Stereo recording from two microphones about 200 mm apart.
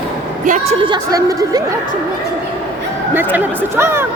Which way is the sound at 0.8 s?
20° right (ahead or behind).